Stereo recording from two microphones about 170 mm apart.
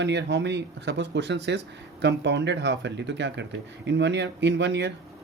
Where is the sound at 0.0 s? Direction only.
90° right.